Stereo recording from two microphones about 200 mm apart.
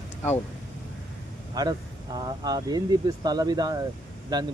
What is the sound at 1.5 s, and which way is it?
Speech, 20° right (ahead or behind).